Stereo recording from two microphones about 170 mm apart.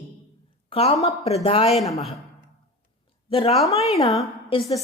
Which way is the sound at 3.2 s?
35° left (ahead or behind).